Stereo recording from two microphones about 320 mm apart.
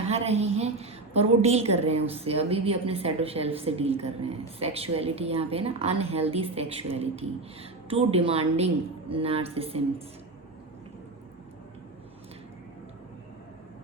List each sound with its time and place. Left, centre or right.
0.1 s a woman's voice: centre